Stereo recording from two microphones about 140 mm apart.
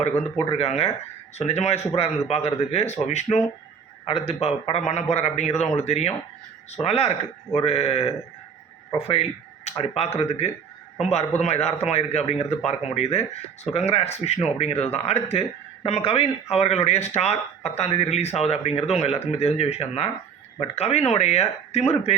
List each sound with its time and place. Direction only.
0.0 s speech: 55° left (ahead or behind)